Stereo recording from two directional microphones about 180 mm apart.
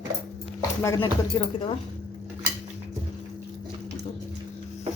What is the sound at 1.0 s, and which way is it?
Speech, 30° left (ahead or behind).